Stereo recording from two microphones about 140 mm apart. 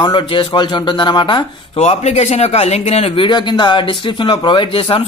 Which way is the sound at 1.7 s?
50° left (ahead or behind).